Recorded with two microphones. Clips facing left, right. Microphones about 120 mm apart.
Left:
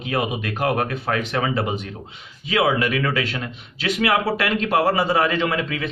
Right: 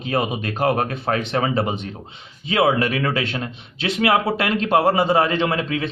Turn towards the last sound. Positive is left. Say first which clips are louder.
# right 2 dB
turn(degrees=-30)  # may be behind; listen again after turning